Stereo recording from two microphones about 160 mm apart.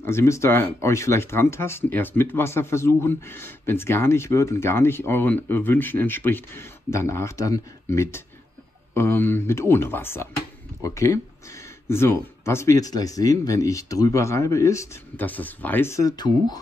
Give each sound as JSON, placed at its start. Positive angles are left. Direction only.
{"t": 0.0, "sound": "speech", "side_deg": 15}